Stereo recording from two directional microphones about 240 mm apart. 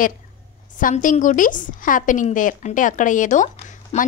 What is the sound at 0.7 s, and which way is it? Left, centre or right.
A woman's voice, left.